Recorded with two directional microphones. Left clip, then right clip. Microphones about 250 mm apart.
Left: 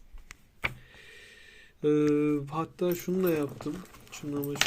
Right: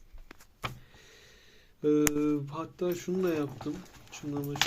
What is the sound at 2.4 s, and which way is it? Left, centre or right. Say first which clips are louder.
Speech: left 3 dB; centre.